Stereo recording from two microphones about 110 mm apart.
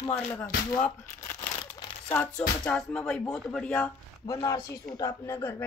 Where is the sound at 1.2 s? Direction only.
30° left (ahead or behind).